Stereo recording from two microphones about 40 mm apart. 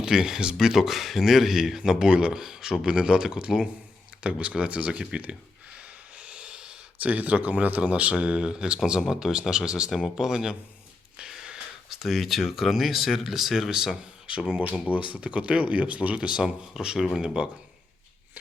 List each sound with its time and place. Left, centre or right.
0.0 s speech: centre
6.1 s snort: right
7.0 s speech: right
8.1 s speech: right
11.3 s a sound: centre
11.9 s speech: centre
14.9 s speech: right
16.4 s speech: centre